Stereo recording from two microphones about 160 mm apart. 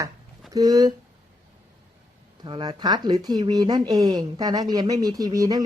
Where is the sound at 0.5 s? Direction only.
25° right (ahead or behind).